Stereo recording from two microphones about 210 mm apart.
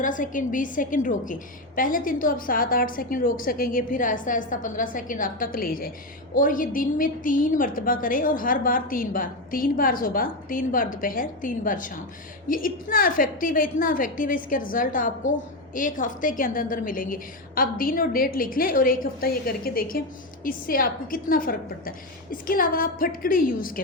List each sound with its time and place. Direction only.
0.0 s a woman's voice: 40° left (ahead or behind)